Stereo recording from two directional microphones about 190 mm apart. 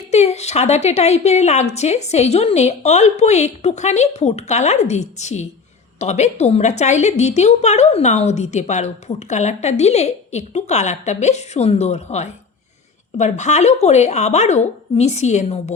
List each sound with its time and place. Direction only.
0.1 s a woman's voice: 35° left (ahead or behind)